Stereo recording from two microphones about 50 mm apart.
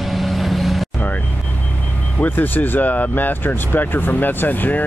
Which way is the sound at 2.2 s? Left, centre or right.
Left.